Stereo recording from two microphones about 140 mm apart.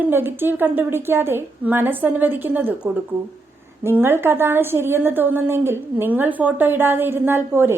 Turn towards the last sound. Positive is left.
turn(degrees=-15)  # may be behind; listen again after turning